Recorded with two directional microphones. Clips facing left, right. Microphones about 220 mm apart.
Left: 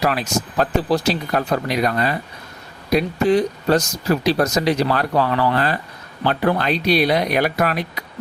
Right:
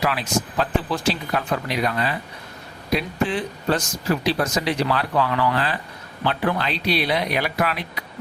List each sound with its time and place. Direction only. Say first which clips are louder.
0.0 s speech: left 3 dB; 45° left (ahead or behind)